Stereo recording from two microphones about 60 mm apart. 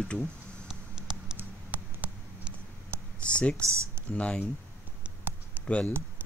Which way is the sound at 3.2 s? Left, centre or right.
Centre.